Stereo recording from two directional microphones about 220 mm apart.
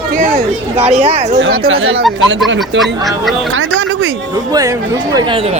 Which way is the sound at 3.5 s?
65° right (ahead or behind).